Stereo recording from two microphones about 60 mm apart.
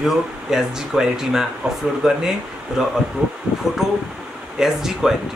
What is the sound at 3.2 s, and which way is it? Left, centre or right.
Speech, centre.